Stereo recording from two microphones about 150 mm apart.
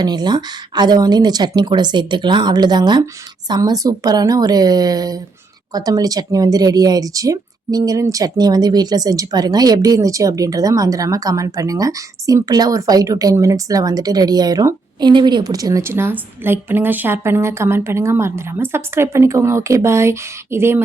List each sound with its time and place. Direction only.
0.0 s speech: 30° right (ahead or behind)